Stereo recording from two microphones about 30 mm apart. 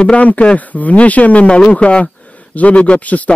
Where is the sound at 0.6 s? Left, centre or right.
Left.